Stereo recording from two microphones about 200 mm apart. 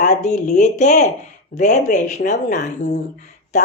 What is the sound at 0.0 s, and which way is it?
Speech, 35° left (ahead or behind).